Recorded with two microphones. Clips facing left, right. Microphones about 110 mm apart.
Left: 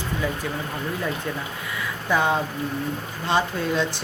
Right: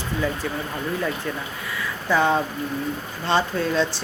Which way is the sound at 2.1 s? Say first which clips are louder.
Right 2 dB; 15° left (ahead or behind).